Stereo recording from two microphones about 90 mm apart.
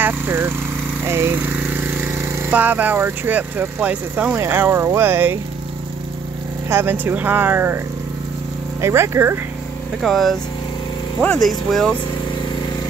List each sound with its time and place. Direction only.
0.0 s speech: 25° right (ahead or behind)
6.7 s speech: 25° right (ahead or behind)
8.8 s speech: 30° right (ahead or behind)
10.0 s speech: centre (ahead or behind)
11.4 s speech: centre (ahead or behind)